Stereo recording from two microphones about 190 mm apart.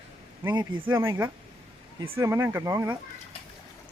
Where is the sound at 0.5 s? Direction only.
25° right (ahead or behind).